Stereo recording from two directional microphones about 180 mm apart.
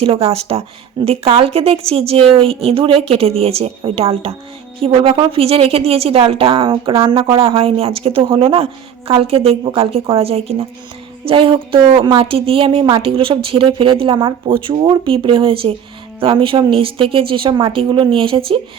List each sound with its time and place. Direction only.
0.0 s a woman's voice: 35° right (ahead or behind)